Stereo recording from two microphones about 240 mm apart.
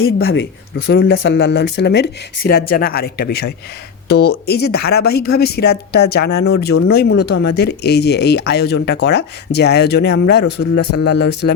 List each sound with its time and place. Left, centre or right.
0.3 s speech: left
0.9 s speech: left